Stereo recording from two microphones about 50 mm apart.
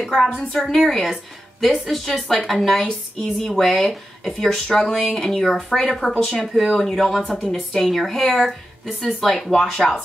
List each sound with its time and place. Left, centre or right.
0.0 s a woman's voice: centre